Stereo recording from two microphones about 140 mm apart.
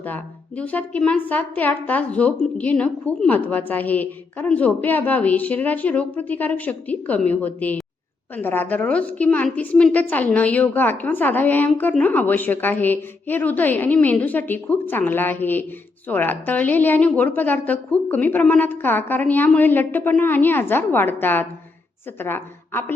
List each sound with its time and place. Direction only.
0.0 s a woman's voice: 10° left (ahead or behind)